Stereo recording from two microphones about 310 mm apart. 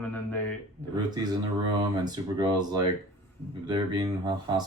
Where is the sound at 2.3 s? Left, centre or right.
Centre.